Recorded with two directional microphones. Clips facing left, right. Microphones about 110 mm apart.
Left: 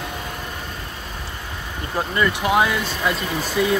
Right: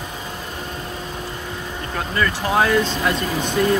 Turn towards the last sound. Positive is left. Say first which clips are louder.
# right 2 dB
turn(degrees=5)  # may be behind; listen again after turning